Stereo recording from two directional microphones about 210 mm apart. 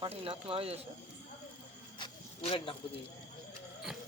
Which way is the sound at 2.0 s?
25° left (ahead or behind).